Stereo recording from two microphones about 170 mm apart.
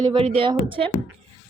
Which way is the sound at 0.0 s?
30° right (ahead or behind).